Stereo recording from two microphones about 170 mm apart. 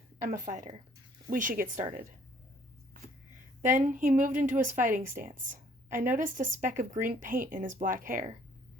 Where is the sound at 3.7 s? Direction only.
50° right (ahead or behind).